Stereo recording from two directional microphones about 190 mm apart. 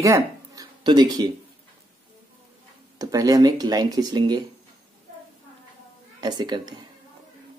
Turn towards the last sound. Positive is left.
turn(degrees=-20)  # may be behind; listen again after turning